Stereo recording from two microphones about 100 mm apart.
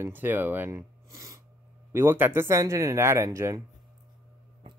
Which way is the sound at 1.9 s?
20° right (ahead or behind).